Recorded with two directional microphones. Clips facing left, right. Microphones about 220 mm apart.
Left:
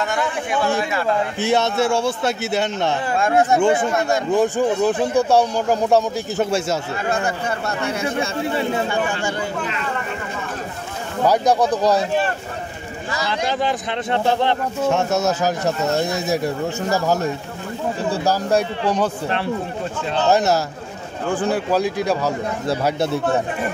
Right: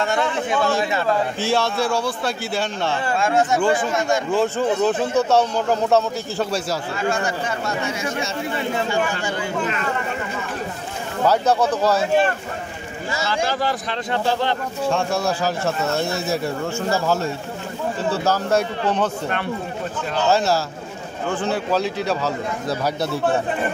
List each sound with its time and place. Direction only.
0.0 s a man's voice: 25° right (ahead or behind)
1.4 s a man's voice: 20° left (ahead or behind)
3.2 s speech: 55° left (ahead or behind)
4.3 s speech: 15° left (ahead or behind)
7.6 s speech: 60° left (ahead or behind)
11.2 s speech: 15° left (ahead or behind)
13.3 s a man's voice: 20° left (ahead or behind)
19.2 s speech: 30° left (ahead or behind)
20.2 s a man's voice: 20° left (ahead or behind)
22.7 s a man's voice: 25° left (ahead or behind)